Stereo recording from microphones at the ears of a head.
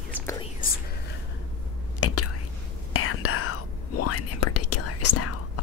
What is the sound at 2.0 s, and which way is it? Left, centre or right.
Whispering, left.